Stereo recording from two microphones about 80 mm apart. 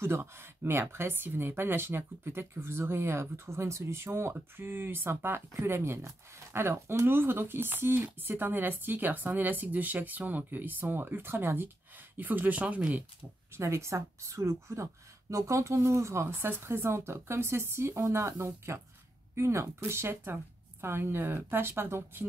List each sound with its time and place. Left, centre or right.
0.0 s speech: right
13.6 s a woman's voice: right